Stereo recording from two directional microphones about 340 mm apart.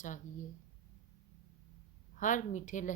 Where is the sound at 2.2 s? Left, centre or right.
Left.